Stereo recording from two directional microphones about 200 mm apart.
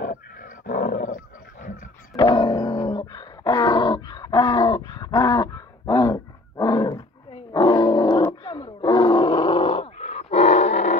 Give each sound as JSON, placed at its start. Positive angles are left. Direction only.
{"t": 0.0, "sound": "neigh", "side_deg": 45}
{"t": 2.1, "sound": "dog", "side_deg": 20}